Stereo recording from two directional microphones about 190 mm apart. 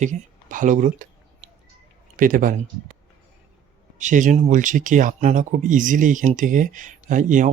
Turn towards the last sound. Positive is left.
turn(degrees=-45)  # may be behind; listen again after turning